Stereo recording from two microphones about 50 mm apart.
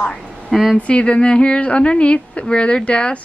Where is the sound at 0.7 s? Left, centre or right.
Left.